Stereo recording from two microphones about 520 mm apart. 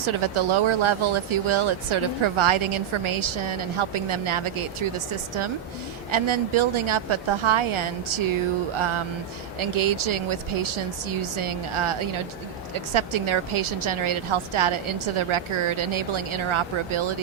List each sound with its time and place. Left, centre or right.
0.0 s speech: right
9.6 s a woman's voice: right